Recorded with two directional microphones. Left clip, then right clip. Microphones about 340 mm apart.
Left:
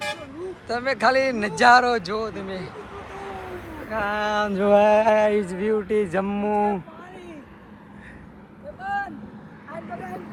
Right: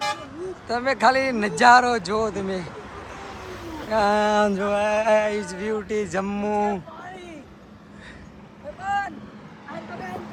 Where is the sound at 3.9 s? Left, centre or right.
Centre.